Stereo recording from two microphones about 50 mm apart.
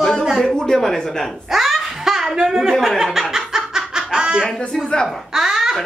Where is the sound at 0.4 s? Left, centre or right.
Centre.